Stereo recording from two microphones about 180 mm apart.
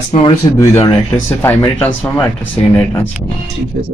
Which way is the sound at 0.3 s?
20° left (ahead or behind).